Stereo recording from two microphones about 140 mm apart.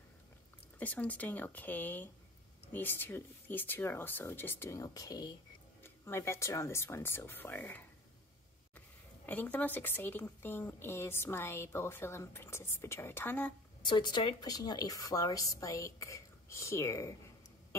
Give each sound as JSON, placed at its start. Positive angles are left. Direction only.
{"t": 0.7, "sound": "speech", "side_deg": 10}
{"t": 13.8, "sound": "a woman's voice", "side_deg": 35}